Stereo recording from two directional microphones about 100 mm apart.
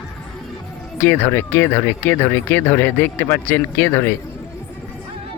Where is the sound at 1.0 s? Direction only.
20° left (ahead or behind).